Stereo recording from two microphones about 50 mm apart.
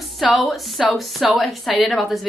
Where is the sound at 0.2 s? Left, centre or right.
Centre.